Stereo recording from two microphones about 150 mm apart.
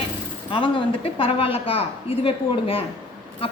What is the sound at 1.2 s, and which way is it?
A woman's voice, 40° left (ahead or behind).